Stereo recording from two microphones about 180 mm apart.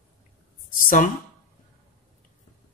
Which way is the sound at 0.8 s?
50° left (ahead or behind).